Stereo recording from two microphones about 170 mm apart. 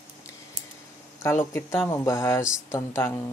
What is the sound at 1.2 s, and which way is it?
Speech, 15° left (ahead or behind).